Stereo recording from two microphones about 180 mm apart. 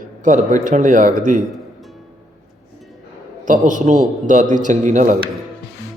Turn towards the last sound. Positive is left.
turn(degrees=-45)  # may be behind; listen again after turning